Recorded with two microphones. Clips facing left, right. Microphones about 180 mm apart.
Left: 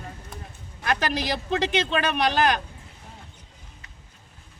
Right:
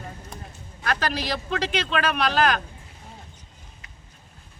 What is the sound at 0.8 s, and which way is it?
A man's voice, 20° left (ahead or behind).